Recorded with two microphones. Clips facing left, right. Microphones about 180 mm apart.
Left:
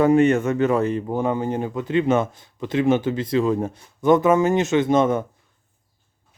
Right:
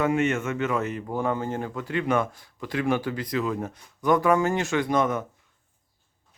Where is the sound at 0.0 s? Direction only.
35° left (ahead or behind).